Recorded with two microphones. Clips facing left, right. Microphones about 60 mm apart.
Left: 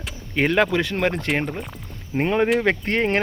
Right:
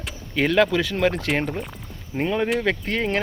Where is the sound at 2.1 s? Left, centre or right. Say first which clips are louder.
Left 3 dB; left.